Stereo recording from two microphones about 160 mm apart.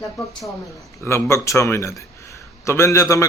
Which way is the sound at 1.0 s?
15° left (ahead or behind).